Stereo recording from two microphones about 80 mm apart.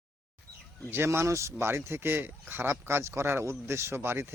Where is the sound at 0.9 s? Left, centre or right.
Right.